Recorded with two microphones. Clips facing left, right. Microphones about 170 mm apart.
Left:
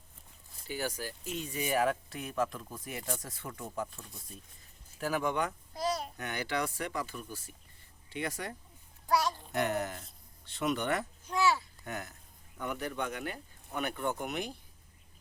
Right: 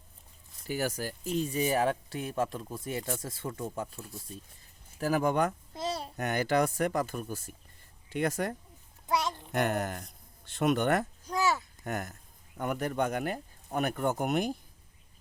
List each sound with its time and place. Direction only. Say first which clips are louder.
0.7 s speech: right 4 dB; 45° right (ahead or behind); by 3.8 s 25° right (ahead or behind)
4.9 s speech: right 5 dB; 40° right (ahead or behind)
5.7 s babbling: left 1 dB; 25° right (ahead or behind)
6.1 s speech: right 7 dB; 45° right (ahead or behind)
9.0 s a sound: left 1 dB; 20° right (ahead or behind)
9.5 s speech: right 6 dB; 55° right (ahead or behind)
10.4 s a sound: right 5 dB; 50° right (ahead or behind)
12.5 s speech: right 5 dB; 45° right (ahead or behind)